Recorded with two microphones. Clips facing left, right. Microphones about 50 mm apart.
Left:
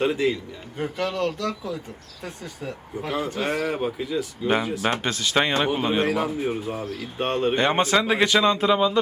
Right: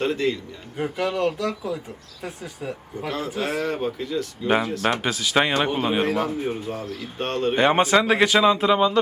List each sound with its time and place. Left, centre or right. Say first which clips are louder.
0.0 s speech: left 1 dB; centre
0.8 s speech: right 2 dB; centre
7.5 s speech: right 5 dB; centre